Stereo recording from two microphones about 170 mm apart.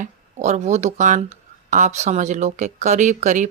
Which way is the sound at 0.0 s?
45° right (ahead or behind).